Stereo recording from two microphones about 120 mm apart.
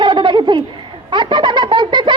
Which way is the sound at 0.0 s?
40° right (ahead or behind).